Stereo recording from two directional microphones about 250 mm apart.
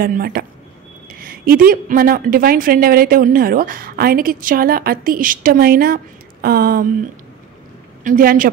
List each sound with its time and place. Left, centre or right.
0.0 s speech: right
8.0 s speech: right